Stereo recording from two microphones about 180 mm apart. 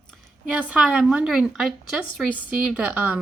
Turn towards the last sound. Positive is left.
turn(degrees=-10)  # may be behind; listen again after turning